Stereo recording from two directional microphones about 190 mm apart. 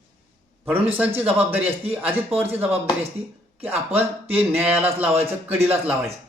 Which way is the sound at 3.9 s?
10° right (ahead or behind).